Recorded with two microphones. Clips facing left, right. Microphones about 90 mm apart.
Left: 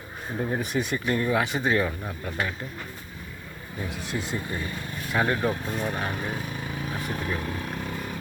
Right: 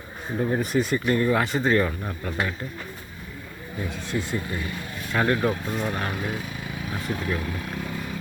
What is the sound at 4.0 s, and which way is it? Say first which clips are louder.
Speech: right 3 dB; 20° left (ahead or behind).